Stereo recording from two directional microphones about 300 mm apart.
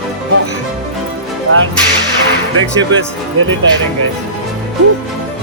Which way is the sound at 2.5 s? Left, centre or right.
Right.